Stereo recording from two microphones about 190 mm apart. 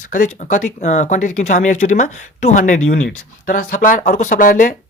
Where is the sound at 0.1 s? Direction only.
40° left (ahead or behind).